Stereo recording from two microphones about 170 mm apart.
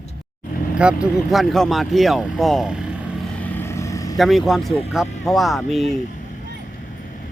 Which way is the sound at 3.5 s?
15° left (ahead or behind).